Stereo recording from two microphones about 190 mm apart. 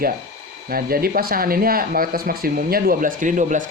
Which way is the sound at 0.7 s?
50° right (ahead or behind).